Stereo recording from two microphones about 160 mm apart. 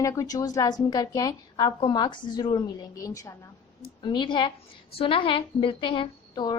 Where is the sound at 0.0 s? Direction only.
20° left (ahead or behind).